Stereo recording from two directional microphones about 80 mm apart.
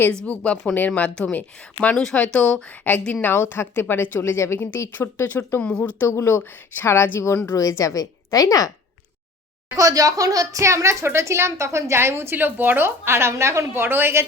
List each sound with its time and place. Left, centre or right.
0.1 s a woman's voice: centre
4.2 s a woman's voice: left
5.6 s a woman's voice: centre
6.1 s a woman's voice: left
7.5 s a woman's voice: left
9.7 s speech: right